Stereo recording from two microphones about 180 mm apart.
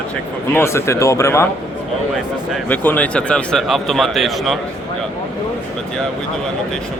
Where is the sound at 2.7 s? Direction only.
10° left (ahead or behind).